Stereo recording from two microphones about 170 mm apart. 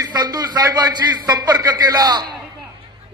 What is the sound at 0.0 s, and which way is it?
A man's voice, 25° right (ahead or behind).